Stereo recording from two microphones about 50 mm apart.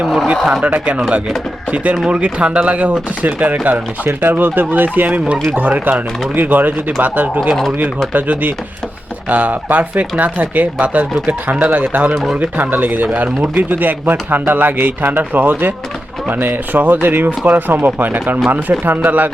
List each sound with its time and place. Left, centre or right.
0.6 s speech: right